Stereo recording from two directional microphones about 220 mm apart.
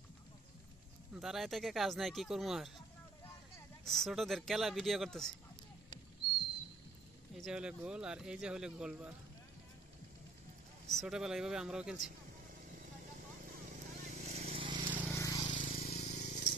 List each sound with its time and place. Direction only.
1.1 s speech: centre (ahead or behind)
3.8 s speech: centre (ahead or behind)
7.3 s speech: centre (ahead or behind)
10.9 s speech: centre (ahead or behind)
13.9 s vehicle: 30° right (ahead or behind)
15.0 s vehicle: 15° left (ahead or behind)
15.5 s a sound: 35° left (ahead or behind)